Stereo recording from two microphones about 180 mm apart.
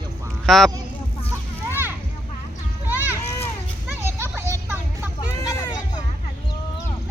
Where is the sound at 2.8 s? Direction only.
10° right (ahead or behind).